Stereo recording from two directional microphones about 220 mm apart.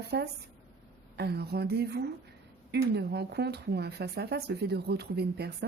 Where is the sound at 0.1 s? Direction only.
50° right (ahead or behind).